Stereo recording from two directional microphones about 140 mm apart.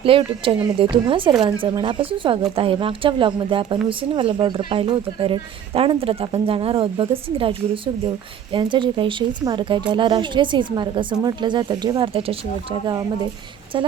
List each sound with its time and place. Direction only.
0.0 s speech: 40° right (ahead or behind)
8.5 s speech: 35° right (ahead or behind)